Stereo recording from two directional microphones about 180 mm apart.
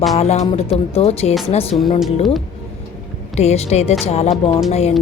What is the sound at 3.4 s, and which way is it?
Music, 35° left (ahead or behind).